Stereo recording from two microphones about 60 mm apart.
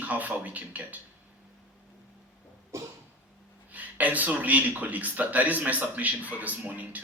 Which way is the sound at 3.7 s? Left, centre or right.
Right.